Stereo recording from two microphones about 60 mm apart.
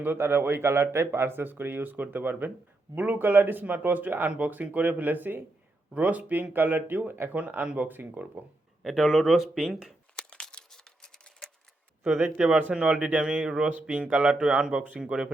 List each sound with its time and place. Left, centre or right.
0.0 s speech: right
8.8 s speech: centre
10.2 s crumpling: centre
11.0 s a sound: centre
12.7 s speech: centre